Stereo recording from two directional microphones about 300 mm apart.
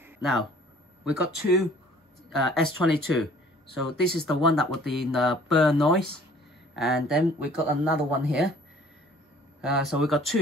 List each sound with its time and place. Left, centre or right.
0.0 s a sound: centre
1.0 s speech: centre
4.3 s speech: centre
9.6 s speech: centre